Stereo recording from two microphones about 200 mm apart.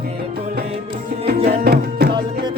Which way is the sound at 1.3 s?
50° right (ahead or behind).